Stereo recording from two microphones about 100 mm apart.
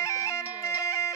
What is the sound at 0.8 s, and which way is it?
Bagpipes, 30° left (ahead or behind).